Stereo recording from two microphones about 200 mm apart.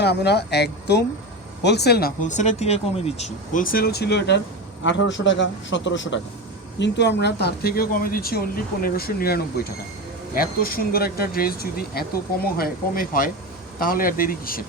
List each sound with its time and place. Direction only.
0.0 s a man's voice: 55° left (ahead or behind)
4.8 s a man's voice: 65° left (ahead or behind); by 14.6 s 45° left (ahead or behind)